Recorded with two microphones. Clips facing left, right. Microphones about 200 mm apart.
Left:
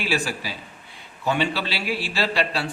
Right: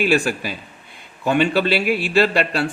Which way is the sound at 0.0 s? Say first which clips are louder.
Right 7 dB; 55° right (ahead or behind).